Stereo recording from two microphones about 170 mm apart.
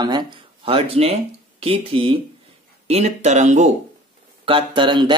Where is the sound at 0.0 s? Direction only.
25° right (ahead or behind); by 3.7 s 45° right (ahead or behind).